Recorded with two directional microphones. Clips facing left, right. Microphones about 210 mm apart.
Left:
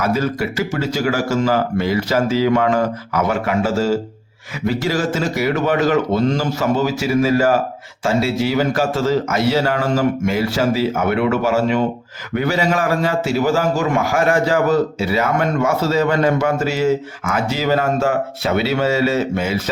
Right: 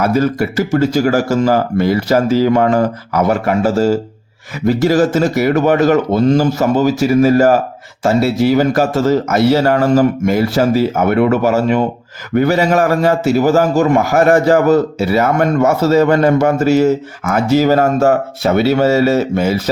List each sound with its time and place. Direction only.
0.0 s a man's voice: 45° right (ahead or behind)